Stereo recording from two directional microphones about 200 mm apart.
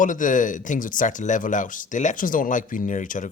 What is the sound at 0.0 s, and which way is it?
Speech, 40° left (ahead or behind).